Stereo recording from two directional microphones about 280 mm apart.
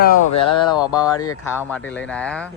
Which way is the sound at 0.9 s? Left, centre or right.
Centre.